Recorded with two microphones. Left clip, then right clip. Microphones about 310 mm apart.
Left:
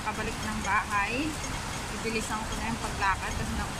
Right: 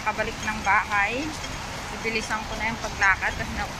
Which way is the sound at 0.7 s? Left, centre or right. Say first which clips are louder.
Right 6 dB; centre.